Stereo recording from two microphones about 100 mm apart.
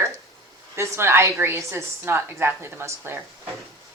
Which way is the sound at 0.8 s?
25° right (ahead or behind).